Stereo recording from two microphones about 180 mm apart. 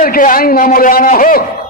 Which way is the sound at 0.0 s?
50° left (ahead or behind).